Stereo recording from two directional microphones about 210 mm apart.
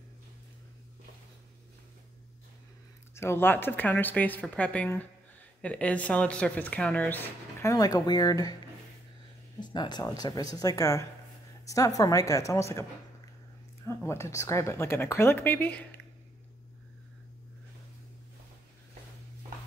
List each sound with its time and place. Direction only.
3.2 s speech: 10° left (ahead or behind)
9.6 s a woman's voice: 20° left (ahead or behind)